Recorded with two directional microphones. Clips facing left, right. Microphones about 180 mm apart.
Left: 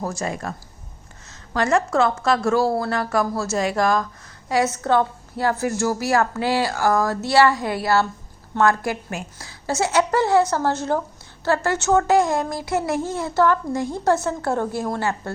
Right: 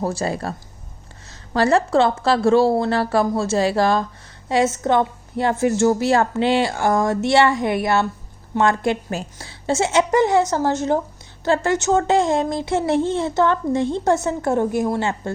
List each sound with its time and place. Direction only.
0.0 s speech: 30° right (ahead or behind)